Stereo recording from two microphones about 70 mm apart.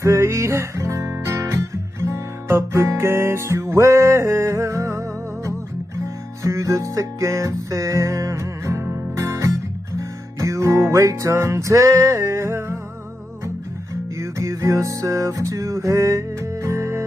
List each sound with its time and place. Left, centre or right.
0.0 s music: right
14.2 s music: right